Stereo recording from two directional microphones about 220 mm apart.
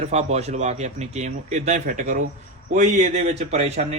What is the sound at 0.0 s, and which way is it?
A man's voice, 30° right (ahead or behind).